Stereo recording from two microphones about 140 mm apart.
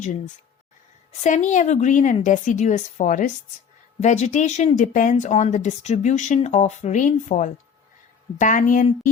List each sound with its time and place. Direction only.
1.2 s a woman's voice: 60° left (ahead or behind)